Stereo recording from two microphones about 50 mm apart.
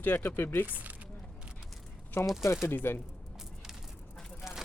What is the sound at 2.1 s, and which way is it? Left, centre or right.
Speech, left.